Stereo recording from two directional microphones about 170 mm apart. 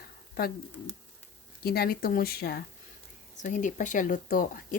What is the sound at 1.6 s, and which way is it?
Speech, 65° left (ahead or behind).